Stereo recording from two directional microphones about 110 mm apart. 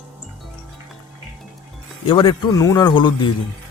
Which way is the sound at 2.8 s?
45° left (ahead or behind).